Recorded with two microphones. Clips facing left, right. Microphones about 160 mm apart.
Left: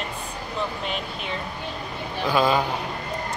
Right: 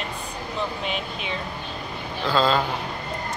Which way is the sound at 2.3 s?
15° left (ahead or behind).